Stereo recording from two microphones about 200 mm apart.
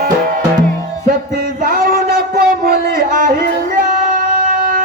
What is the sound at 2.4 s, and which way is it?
Music, 45° right (ahead or behind).